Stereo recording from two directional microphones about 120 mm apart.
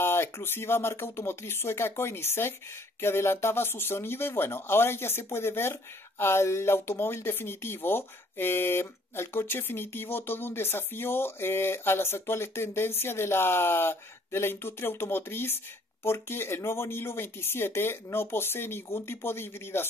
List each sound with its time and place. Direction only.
0.0 s speech: 20° left (ahead or behind)